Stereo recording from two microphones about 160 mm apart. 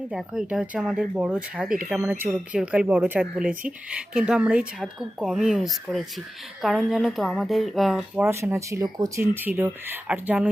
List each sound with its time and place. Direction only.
0.1 s speech: 5° right (ahead or behind)
8.2 s speech: 15° right (ahead or behind)